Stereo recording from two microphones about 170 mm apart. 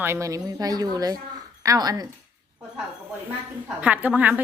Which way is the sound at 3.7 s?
10° right (ahead or behind).